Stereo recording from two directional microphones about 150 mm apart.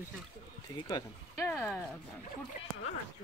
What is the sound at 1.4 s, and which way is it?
Speech, 15° left (ahead or behind).